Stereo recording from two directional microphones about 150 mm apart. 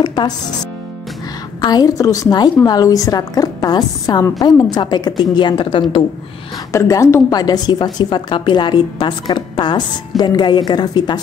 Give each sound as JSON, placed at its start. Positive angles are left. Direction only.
{"t": 0.0, "sound": "music", "side_deg": 30}
{"t": 1.6, "sound": "a woman's voice", "side_deg": 25}
{"t": 6.7, "sound": "a woman's voice", "side_deg": 20}